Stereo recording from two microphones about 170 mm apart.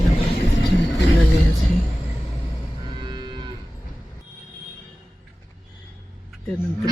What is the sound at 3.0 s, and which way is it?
Moo, 25° right (ahead or behind).